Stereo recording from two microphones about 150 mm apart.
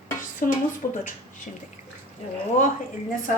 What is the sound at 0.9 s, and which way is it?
Speech, 60° left (ahead or behind).